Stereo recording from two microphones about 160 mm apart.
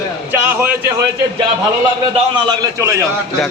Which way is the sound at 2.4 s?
20° right (ahead or behind).